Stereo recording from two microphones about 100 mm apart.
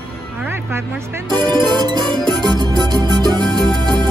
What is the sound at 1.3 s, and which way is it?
Music, 45° right (ahead or behind).